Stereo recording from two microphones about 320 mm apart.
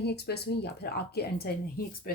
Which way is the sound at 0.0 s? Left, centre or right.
Left.